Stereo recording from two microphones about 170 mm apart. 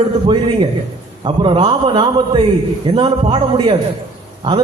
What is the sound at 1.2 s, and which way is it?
A man's voice, 30° right (ahead or behind).